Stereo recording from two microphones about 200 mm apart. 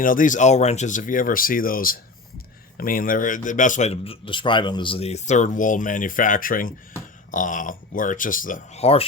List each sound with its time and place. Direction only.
0.0 s speech: 45° left (ahead or behind)